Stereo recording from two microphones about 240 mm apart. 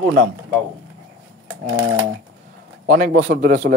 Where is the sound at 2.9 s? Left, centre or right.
Right.